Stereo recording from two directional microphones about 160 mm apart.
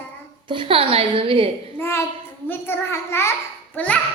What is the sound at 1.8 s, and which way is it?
A child's voice, 15° left (ahead or behind).